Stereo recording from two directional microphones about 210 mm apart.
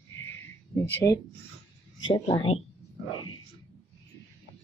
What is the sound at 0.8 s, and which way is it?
Speech, 10° left (ahead or behind).